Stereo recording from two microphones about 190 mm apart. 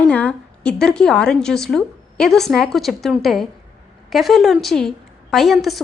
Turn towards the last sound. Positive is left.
turn(degrees=0)  # may be behind; listen again after turning